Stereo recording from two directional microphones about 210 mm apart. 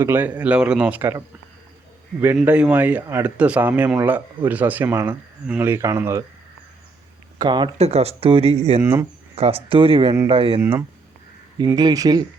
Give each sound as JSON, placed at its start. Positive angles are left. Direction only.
{"t": 0.0, "sound": "speech", "side_deg": -10}
{"t": 2.2, "sound": "speech", "side_deg": -10}
{"t": 7.3, "sound": "speech", "side_deg": -20}
{"t": 8.8, "sound": "speech", "side_deg": -10}
{"t": 9.3, "sound": "speech", "side_deg": -25}
{"t": 10.6, "sound": "speech", "side_deg": -10}